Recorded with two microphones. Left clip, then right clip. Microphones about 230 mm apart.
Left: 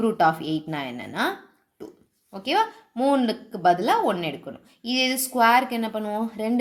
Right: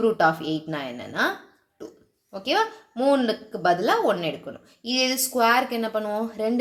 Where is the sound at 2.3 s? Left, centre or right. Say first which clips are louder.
Even; left.